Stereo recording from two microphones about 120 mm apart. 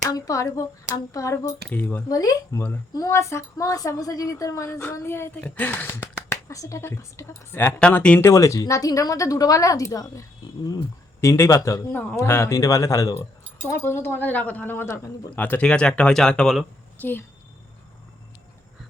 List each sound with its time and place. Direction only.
0.0 s a woman's voice: 30° left (ahead or behind)
1.7 s speech: 15° left (ahead or behind)
2.0 s a woman's voice: 30° left (ahead or behind)
6.3 s a woman's voice: 25° left (ahead or behind)
7.8 s speech: 10° left (ahead or behind)
8.2 s a woman's voice: 25° left (ahead or behind)
11.2 s a woman's voice: 25° left (ahead or behind); by 16.6 s 5° left (ahead or behind)
17.0 s speech: 15° left (ahead or behind)